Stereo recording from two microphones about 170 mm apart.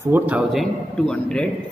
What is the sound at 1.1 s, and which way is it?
Speech, 5° left (ahead or behind).